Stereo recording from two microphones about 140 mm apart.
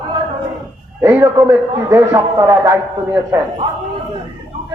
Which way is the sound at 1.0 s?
20° right (ahead or behind).